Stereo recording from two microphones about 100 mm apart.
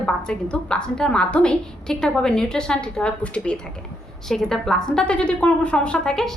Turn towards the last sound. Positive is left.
turn(degrees=5)  # may be behind; listen again after turning